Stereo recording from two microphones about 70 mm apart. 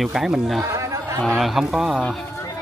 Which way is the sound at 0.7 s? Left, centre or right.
Right.